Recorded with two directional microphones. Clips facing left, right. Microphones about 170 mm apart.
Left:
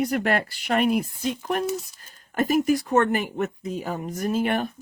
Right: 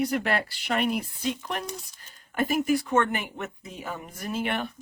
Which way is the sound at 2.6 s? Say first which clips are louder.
Left 3 dB; 40° left (ahead or behind).